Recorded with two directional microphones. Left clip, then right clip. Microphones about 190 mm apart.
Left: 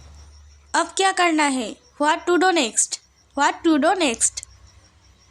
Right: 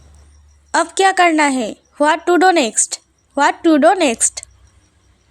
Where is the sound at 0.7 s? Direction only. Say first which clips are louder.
Right 6 dB; 30° right (ahead or behind).